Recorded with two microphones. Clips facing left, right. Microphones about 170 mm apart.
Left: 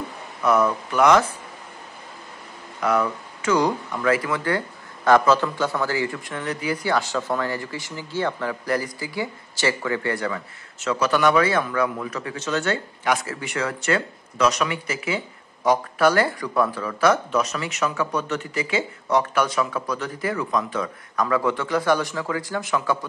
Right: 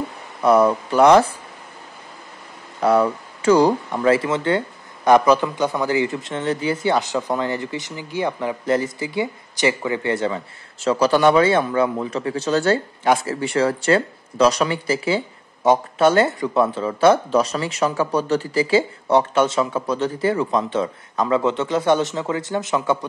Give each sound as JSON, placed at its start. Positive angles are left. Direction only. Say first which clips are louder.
{"t": 0.4, "sound": "speech", "louder": "right 5 dB", "side_deg": -30}
{"t": 2.8, "sound": "speech", "louder": "right 5 dB", "side_deg": -30}